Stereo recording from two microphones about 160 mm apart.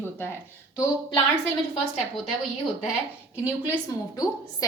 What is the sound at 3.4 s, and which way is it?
Speech, 20° left (ahead or behind).